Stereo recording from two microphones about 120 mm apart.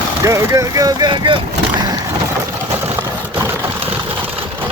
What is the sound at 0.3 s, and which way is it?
Speech, 25° right (ahead or behind).